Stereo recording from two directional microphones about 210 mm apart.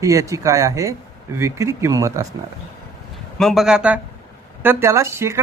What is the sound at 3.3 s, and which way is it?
Speech, centre (ahead or behind).